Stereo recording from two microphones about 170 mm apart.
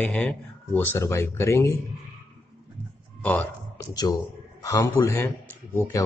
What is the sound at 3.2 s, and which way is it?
Speech, 10° left (ahead or behind).